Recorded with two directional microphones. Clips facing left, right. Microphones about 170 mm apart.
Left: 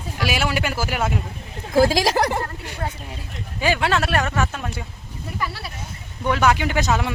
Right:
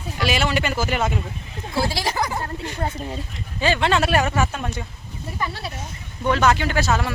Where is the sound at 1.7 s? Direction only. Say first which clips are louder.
Left 7 dB; 90° left.